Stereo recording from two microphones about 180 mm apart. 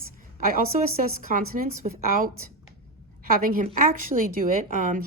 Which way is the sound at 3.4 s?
50° right (ahead or behind).